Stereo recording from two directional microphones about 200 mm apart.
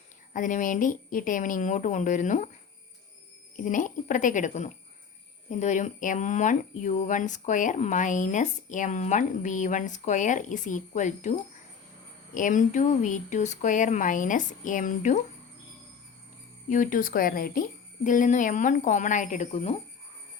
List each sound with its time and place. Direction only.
0.3 s speech: 40° left (ahead or behind)
3.6 s speech: 40° left (ahead or behind)
16.6 s speech: 40° left (ahead or behind)